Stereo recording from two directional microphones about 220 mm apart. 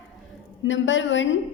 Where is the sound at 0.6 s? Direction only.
55° left (ahead or behind).